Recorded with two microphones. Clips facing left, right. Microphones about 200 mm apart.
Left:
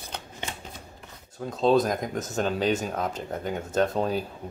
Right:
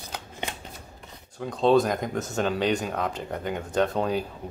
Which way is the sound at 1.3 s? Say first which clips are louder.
Right 1 dB; centre (ahead or behind).